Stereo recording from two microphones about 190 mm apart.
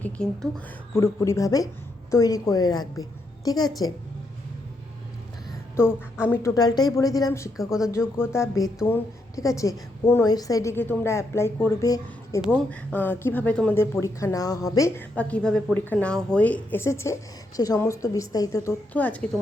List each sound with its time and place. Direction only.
0.0 s a woman's voice: 5° left (ahead or behind)
5.8 s a woman's voice: 15° left (ahead or behind)
7.5 s speech: centre (ahead or behind)
7.9 s speech: 15° left (ahead or behind)